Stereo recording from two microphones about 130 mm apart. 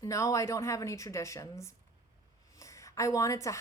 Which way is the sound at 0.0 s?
25° left (ahead or behind).